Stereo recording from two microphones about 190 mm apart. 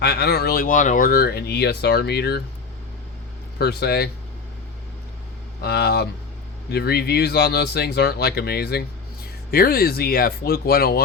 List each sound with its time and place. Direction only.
0.0 s speech: 55° left (ahead or behind)
3.6 s speech: 55° left (ahead or behind)
5.5 s speech: 55° left (ahead or behind)